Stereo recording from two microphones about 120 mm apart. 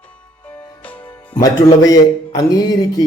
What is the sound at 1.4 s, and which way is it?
A man's voice, 30° left (ahead or behind).